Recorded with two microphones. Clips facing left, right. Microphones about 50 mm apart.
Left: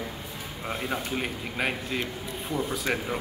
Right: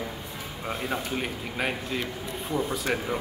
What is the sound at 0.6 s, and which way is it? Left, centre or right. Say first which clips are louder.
A man's voice: even; centre.